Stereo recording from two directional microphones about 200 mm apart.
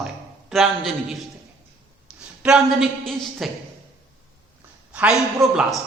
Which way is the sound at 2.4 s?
5° right (ahead or behind).